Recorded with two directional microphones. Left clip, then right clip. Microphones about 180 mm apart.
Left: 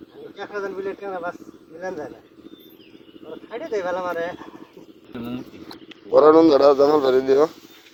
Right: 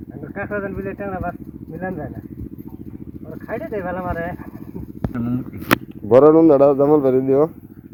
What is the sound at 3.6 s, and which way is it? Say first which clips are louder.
Speech: left 2 dB; 20° right (ahead or behind).